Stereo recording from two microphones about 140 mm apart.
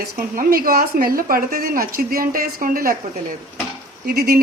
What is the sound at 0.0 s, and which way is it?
A woman's voice, 85° right.